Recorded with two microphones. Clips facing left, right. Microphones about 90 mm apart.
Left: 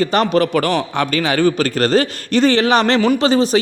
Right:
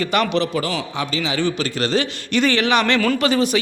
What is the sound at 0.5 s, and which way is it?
A man's voice, 60° left (ahead or behind).